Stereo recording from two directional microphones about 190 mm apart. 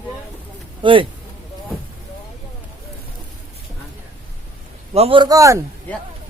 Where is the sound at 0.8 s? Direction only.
25° right (ahead or behind).